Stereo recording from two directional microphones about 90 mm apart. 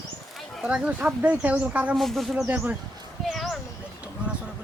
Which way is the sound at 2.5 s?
15° right (ahead or behind).